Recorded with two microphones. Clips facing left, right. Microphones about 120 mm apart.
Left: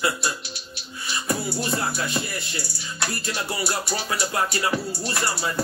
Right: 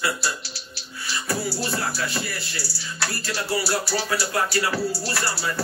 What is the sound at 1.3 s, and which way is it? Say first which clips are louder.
Speech: left 1 dB; 20° left (ahead or behind).